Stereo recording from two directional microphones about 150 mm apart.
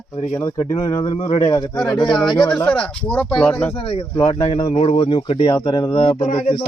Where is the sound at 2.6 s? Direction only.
5° left (ahead or behind).